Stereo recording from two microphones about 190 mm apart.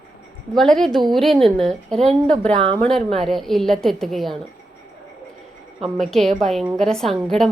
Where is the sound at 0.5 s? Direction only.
Centre (ahead or behind).